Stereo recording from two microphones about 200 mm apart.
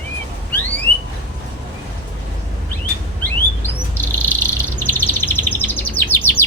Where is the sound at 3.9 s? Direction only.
10° left (ahead or behind).